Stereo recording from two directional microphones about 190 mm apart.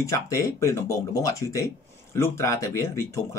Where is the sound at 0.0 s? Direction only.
15° left (ahead or behind).